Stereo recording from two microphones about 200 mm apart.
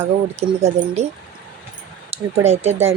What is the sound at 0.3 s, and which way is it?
Speech, 35° right (ahead or behind).